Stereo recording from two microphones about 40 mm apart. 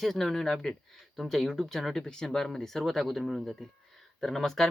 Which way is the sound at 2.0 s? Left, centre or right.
Left.